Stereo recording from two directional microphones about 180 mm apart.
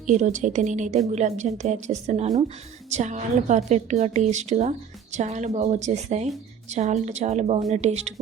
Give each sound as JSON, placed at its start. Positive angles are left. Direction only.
{"t": 0.0, "sound": "a woman's voice", "side_deg": -45}